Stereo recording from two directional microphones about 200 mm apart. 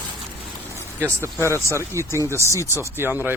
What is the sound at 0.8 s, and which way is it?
Speech, 10° right (ahead or behind).